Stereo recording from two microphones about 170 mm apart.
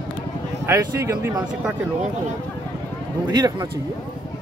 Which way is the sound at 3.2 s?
25° right (ahead or behind).